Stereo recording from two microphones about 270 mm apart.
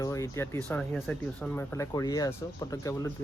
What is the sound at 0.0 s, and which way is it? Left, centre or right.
Speech, centre.